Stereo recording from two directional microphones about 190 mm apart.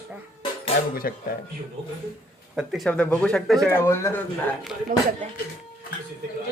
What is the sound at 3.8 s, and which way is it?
Speech, 15° left (ahead or behind).